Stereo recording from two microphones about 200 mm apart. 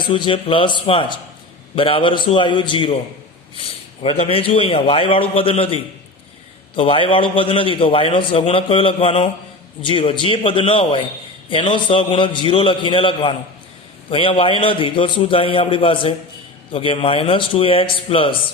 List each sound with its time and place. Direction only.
0.0 s a man's voice: 25° left (ahead or behind)